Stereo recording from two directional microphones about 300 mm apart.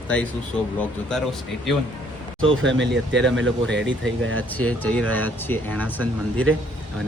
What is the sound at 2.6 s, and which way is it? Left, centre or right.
Speech, right.